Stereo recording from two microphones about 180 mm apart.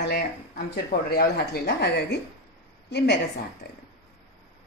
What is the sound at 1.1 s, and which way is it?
Speech, 60° left (ahead or behind).